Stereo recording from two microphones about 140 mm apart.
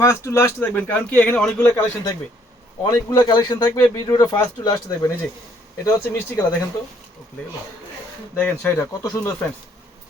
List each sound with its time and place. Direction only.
0.0 s speech: 20° left (ahead or behind)
1.6 s speech: 20° left (ahead or behind)
8.4 s speech: 15° left (ahead or behind)